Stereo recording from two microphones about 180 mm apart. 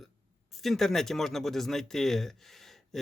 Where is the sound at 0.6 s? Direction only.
Centre (ahead or behind).